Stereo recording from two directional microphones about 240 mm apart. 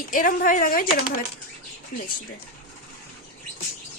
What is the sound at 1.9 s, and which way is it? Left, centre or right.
Speech, left.